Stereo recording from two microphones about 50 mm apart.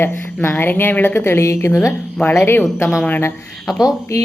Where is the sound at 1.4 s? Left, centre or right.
Left.